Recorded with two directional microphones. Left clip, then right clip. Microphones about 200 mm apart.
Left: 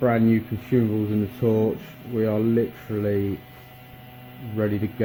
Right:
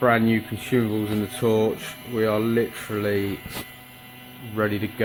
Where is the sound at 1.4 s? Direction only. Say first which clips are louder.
Right 1 dB; 20° right (ahead or behind).